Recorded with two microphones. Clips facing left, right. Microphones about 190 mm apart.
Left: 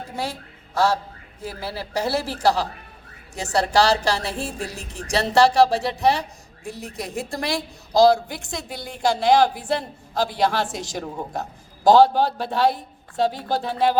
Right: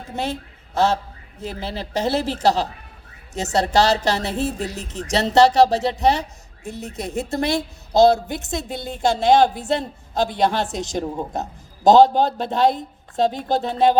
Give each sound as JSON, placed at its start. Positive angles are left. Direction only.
{"t": 0.2, "sound": "a woman's voice", "side_deg": -20}